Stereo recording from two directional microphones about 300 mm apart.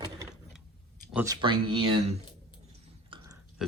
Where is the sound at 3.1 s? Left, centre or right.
Centre.